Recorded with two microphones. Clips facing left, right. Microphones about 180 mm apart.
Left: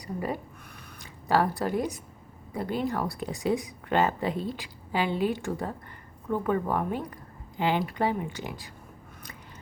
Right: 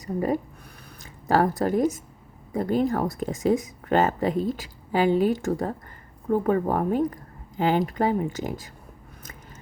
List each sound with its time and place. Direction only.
0.0 s speech: 45° right (ahead or behind)